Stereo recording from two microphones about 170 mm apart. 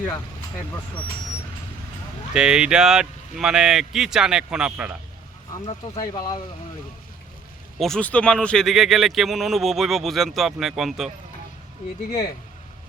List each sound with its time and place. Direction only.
2.3 s speech: 5° right (ahead or behind)
5.6 s speech: 40° left (ahead or behind)
6.1 s speech: 20° left (ahead or behind)
7.8 s speech: 5° left (ahead or behind)